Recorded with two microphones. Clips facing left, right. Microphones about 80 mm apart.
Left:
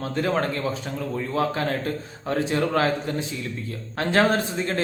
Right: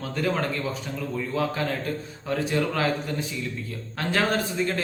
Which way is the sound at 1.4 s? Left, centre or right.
Left.